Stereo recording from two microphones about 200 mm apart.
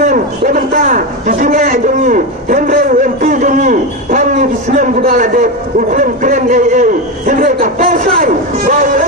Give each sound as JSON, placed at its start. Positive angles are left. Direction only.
{"t": 0.0, "sound": "a man's voice", "side_deg": -40}